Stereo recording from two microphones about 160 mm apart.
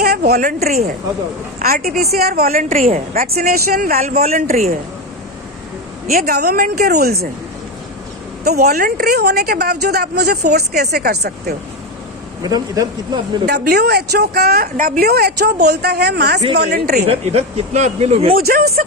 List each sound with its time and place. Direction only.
0.0 s a woman's voice: 75° right (ahead or behind)
6.1 s speech: 65° right (ahead or behind)
8.4 s speech: 75° right (ahead or behind); by 10.6 s 90° right
10.7 s speech: 70° right (ahead or behind)
12.4 s a man's voice: 25° right (ahead or behind)
13.4 s a woman's voice: 85° right
17.1 s speech: 40° right (ahead or behind)
18.4 s a woman's voice: 65° right (ahead or behind)